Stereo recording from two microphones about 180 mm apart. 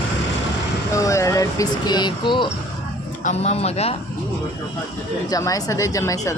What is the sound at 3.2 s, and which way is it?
Speech, 40° left (ahead or behind).